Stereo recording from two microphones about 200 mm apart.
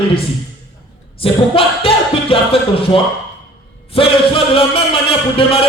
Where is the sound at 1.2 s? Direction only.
30° left (ahead or behind).